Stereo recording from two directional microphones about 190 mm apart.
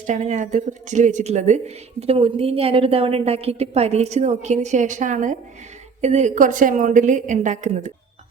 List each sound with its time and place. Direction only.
0.0 s speech: 40° right (ahead or behind)